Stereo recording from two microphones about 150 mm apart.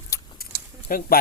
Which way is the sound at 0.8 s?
70° left (ahead or behind).